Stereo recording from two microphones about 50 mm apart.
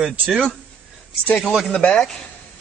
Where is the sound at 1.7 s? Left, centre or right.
Centre.